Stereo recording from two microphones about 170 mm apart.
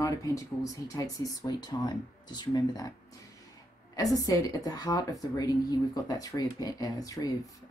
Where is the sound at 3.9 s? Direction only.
20° left (ahead or behind).